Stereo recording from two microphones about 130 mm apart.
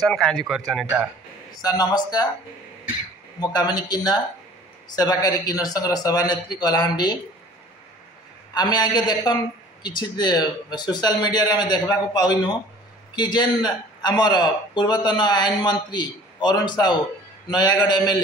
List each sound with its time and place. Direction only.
0.1 s speech: 5° left (ahead or behind)
1.6 s speech: 30° left (ahead or behind)
3.3 s a man's voice: 30° left (ahead or behind)
8.5 s speech: 30° left (ahead or behind)